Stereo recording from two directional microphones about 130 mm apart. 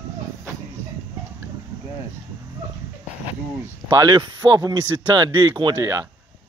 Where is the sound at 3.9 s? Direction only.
30° right (ahead or behind).